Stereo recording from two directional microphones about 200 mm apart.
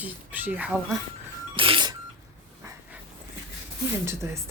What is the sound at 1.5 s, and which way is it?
Music, 25° right (ahead or behind).